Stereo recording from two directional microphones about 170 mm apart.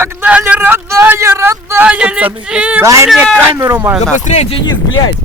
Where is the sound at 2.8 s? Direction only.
15° right (ahead or behind).